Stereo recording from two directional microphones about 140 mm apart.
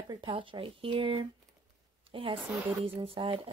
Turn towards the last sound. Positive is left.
turn(degrees=-40)  # may be behind; listen again after turning